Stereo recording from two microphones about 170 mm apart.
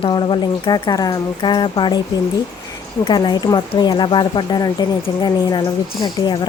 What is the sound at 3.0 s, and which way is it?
Speech, 25° left (ahead or behind).